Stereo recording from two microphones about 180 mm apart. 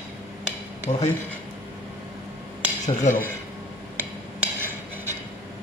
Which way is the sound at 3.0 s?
50° left (ahead or behind).